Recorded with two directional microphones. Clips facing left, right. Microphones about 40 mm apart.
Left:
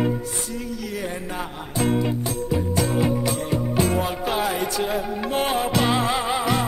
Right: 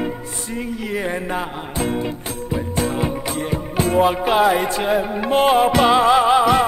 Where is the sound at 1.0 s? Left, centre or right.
Right.